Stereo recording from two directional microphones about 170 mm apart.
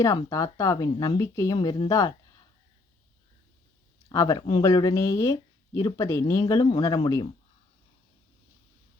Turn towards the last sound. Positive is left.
turn(degrees=20)  # may be behind; listen again after turning